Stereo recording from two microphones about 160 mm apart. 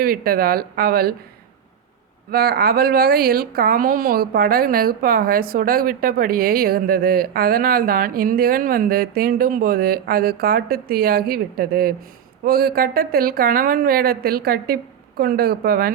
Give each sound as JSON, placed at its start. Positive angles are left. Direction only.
{"t": 0.0, "sound": "speech", "side_deg": -70}
{"t": 2.3, "sound": "speech", "side_deg": -75}